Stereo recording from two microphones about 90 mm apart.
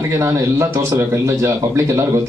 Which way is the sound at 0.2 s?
35° right (ahead or behind).